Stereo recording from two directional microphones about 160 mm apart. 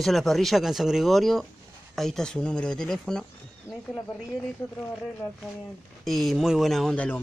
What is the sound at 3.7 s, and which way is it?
Speech, 20° left (ahead or behind).